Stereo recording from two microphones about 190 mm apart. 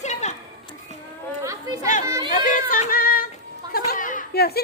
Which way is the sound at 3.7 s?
50° left (ahead or behind).